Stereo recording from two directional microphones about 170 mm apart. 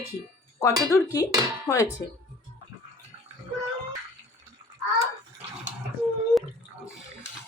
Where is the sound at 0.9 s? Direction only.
20° left (ahead or behind).